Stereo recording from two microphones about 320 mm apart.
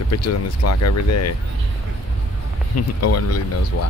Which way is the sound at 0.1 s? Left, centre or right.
Left.